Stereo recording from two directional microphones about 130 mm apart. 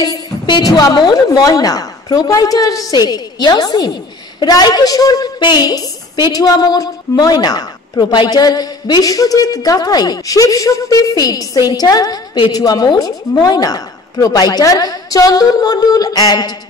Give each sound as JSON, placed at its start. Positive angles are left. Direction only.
{"t": 0.0, "sound": "a woman's voice", "side_deg": 30}